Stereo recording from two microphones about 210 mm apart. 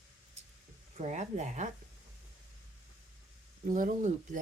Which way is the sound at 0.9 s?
35° right (ahead or behind).